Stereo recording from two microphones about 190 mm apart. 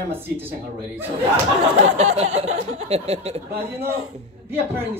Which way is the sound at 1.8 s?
35° right (ahead or behind).